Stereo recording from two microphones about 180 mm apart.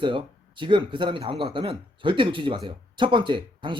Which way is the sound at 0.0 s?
25° right (ahead or behind).